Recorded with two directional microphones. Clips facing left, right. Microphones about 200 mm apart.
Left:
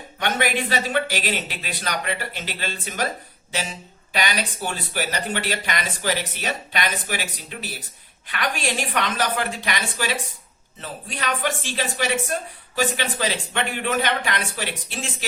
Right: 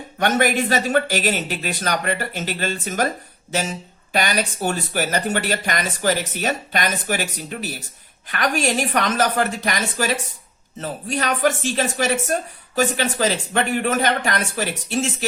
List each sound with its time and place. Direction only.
0.2 s speech: 45° right (ahead or behind)